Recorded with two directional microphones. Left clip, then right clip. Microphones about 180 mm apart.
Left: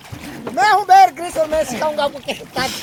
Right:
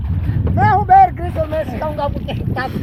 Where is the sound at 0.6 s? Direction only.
20° left (ahead or behind).